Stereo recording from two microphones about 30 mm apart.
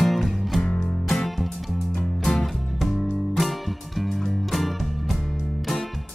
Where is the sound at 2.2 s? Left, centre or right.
Centre.